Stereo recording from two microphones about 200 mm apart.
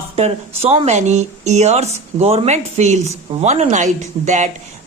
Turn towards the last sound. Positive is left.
turn(degrees=-35)  # may be behind; listen again after turning